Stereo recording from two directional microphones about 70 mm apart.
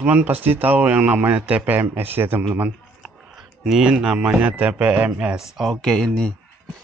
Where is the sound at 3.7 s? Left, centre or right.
Centre.